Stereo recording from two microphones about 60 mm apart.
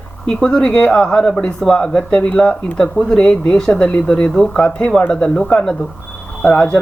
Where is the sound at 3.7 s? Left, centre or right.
Left.